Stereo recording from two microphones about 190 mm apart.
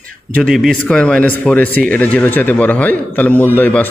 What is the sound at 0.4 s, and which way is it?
A man's voice, centre (ahead or behind).